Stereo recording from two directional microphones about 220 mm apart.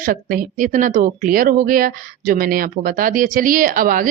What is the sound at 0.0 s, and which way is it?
Speech, 40° right (ahead or behind).